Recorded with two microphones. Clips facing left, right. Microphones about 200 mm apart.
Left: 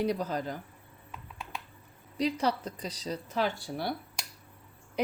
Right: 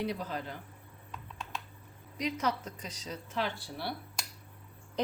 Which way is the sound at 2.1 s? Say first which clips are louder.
Left 4 dB; 35° left (ahead or behind).